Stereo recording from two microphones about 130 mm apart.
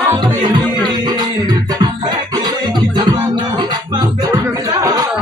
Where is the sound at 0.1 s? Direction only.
30° right (ahead or behind).